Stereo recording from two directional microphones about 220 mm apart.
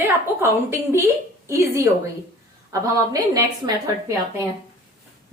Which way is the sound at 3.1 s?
15° right (ahead or behind).